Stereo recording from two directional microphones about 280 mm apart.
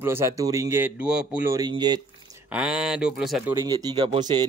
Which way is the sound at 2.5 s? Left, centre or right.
Centre.